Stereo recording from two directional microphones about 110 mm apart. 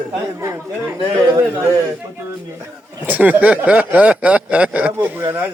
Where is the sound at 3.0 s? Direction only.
15° right (ahead or behind).